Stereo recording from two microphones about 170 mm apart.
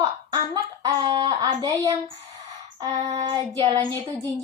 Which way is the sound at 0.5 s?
20° right (ahead or behind).